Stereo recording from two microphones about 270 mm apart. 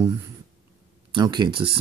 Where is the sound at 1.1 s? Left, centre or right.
Centre.